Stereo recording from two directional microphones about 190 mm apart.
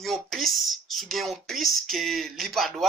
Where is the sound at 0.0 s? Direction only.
Centre (ahead or behind).